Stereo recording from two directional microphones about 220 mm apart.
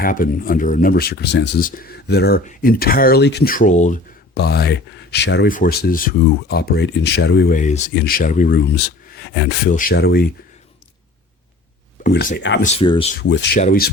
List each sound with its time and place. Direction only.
0.0 s speech: 40° left (ahead or behind)
4.4 s speech: 45° left (ahead or behind)
7.5 s speech: 35° left (ahead or behind); by 9.6 s 50° left (ahead or behind)
9.6 s speech: 40° left (ahead or behind)
12.1 s speech: 45° left (ahead or behind)
12.6 s speech: 25° left (ahead or behind)
13.1 s speech: 50° left (ahead or behind)
13.6 s speech: 40° left (ahead or behind)